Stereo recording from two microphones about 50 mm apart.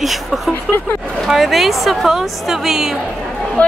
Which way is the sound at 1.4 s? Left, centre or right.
Centre.